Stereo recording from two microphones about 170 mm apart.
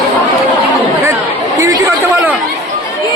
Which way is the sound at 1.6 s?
20° right (ahead or behind).